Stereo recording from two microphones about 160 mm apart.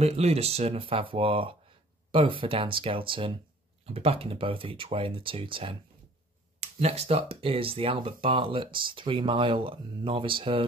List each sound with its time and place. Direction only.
0.0 s speech: 40° right (ahead or behind)